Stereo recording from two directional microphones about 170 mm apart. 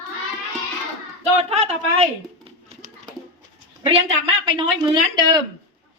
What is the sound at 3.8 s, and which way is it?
A woman's voice, 30° right (ahead or behind).